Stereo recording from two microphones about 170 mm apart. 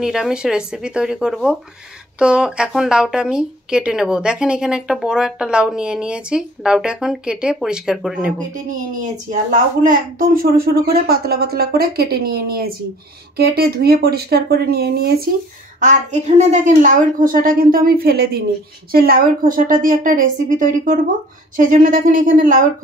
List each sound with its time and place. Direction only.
0.0 s speech: 5° right (ahead or behind)
8.6 s a woman's voice: 50° right (ahead or behind)
15.8 s a woman's voice: 45° right (ahead or behind)